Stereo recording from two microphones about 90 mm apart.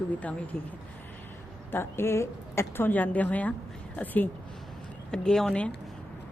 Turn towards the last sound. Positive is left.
turn(degrees=10)  # may be behind; listen again after turning